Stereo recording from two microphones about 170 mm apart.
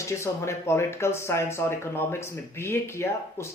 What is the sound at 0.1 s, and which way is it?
Speech, 15° left (ahead or behind).